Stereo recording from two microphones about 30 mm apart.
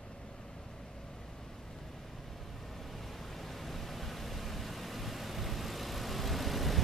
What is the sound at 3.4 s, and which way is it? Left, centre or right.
Vehicle, centre.